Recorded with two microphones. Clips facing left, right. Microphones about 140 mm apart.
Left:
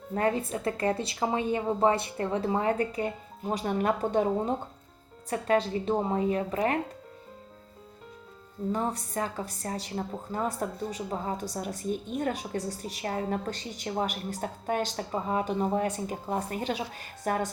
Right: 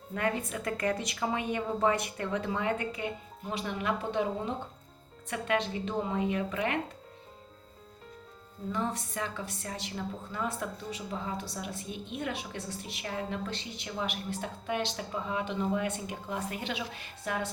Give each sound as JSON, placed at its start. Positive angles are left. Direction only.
{"t": 0.1, "sound": "a woman's voice", "side_deg": 35}
{"t": 8.7, "sound": "a woman's voice", "side_deg": 35}